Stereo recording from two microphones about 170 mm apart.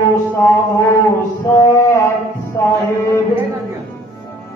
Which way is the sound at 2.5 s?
15° left (ahead or behind).